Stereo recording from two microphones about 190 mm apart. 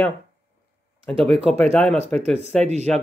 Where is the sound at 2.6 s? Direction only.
35° right (ahead or behind).